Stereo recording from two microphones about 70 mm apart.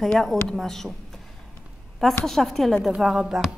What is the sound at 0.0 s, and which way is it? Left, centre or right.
Speech, centre.